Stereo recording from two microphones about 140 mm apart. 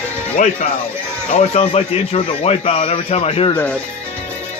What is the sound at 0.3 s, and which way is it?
Speech, 60° left (ahead or behind).